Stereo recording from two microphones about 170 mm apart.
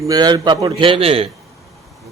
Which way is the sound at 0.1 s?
25° right (ahead or behind).